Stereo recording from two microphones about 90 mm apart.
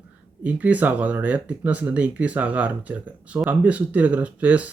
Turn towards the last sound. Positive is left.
turn(degrees=-15)  # may be behind; listen again after turning